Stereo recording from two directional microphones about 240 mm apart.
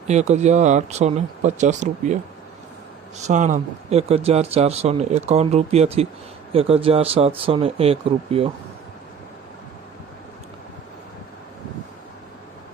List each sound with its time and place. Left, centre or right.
0.1 s speech: right
3.2 s speech: right